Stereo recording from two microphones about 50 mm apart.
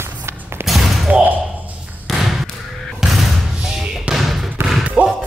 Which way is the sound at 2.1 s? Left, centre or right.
Centre.